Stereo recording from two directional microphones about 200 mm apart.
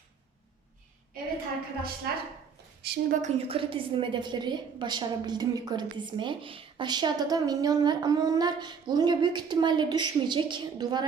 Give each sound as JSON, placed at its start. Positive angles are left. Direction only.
{"t": 2.1, "sound": "a woman's voice", "side_deg": -50}
{"t": 2.8, "sound": "a woman's voice", "side_deg": -40}